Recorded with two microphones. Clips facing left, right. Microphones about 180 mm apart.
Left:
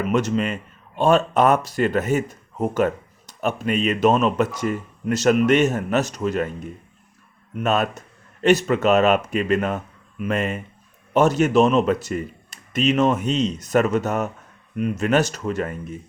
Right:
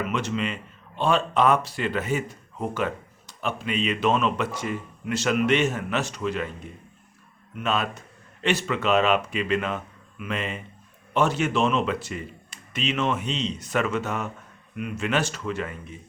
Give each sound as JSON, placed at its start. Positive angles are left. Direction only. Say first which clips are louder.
{"t": 0.0, "sound": "speech", "louder": "left 6 dB", "side_deg": 40}
{"t": 7.5, "sound": "speech", "louder": "left 5 dB", "side_deg": 45}